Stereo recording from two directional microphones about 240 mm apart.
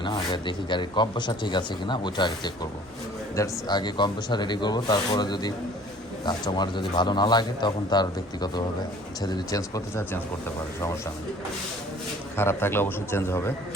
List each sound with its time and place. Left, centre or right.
0.0 s a man's voice: centre
12.4 s a man's voice: centre